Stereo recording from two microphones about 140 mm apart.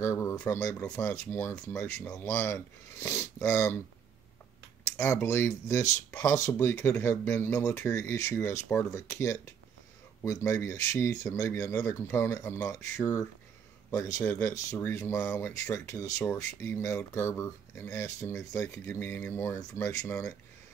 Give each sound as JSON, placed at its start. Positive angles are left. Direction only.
{"t": 0.0, "sound": "speech", "side_deg": 20}
{"t": 4.9, "sound": "a man's voice", "side_deg": 20}